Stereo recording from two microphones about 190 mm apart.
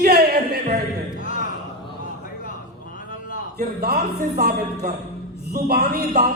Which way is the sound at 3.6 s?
55° right (ahead or behind).